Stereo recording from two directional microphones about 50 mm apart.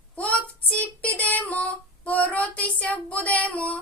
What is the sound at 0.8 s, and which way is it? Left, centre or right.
Child singing, left.